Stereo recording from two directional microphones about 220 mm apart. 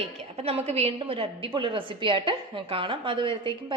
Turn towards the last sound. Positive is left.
turn(degrees=-20)  # may be behind; listen again after turning